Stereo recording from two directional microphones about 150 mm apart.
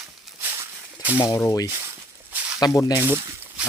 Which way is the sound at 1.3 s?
25° left (ahead or behind).